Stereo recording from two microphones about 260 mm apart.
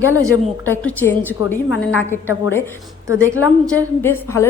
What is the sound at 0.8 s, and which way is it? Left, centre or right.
A woman's voice, centre.